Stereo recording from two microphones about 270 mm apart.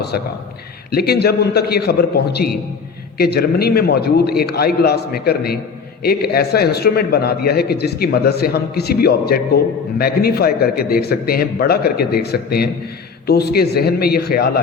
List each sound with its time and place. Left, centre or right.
0.9 s speech: left